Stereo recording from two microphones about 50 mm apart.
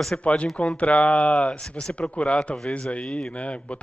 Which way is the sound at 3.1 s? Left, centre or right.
Centre.